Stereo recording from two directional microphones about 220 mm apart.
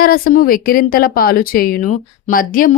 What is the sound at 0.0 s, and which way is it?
A woman's voice, 40° left (ahead or behind).